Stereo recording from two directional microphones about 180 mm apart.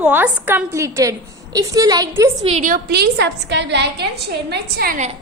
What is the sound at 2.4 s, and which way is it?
Speech, 40° right (ahead or behind).